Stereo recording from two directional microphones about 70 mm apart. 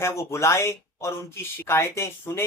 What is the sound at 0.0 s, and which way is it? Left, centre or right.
Speech, left.